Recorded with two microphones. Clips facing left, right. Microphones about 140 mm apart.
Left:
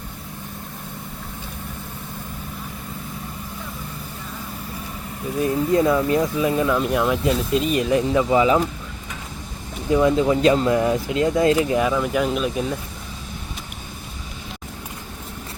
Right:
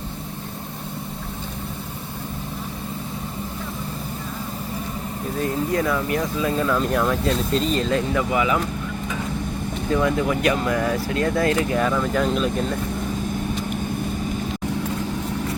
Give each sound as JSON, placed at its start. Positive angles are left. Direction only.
{"t": 5.4, "sound": "speech", "side_deg": 20}
{"t": 9.9, "sound": "speech", "side_deg": 20}